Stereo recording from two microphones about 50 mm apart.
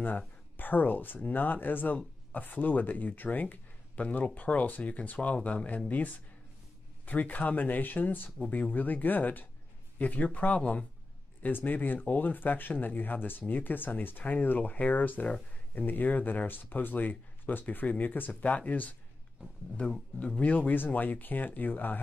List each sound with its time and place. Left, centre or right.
0.6 s speech: left
20.2 s speech: left